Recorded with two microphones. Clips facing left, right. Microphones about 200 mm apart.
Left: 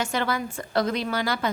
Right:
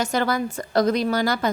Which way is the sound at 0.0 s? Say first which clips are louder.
Right 4 dB; 40° right (ahead or behind).